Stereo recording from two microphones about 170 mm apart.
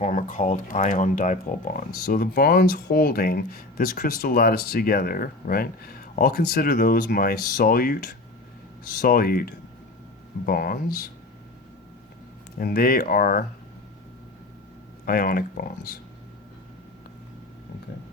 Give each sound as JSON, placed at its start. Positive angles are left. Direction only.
{"t": 0.0, "sound": "speech", "side_deg": 50}
{"t": 12.5, "sound": "speech", "side_deg": 60}
{"t": 15.0, "sound": "speech", "side_deg": 60}